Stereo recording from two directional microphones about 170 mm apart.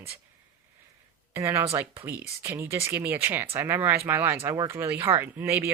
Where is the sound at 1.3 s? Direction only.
15° right (ahead or behind).